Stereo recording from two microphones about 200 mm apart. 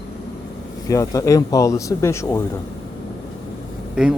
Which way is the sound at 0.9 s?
15° left (ahead or behind).